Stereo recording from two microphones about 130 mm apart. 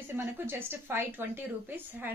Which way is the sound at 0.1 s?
15° right (ahead or behind).